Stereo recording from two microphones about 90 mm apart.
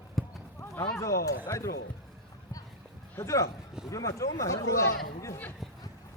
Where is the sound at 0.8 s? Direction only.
35° left (ahead or behind).